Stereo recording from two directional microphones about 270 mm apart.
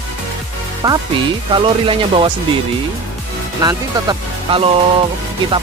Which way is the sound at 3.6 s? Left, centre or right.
Centre.